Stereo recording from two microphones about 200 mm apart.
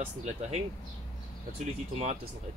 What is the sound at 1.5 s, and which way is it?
Speech, 35° right (ahead or behind).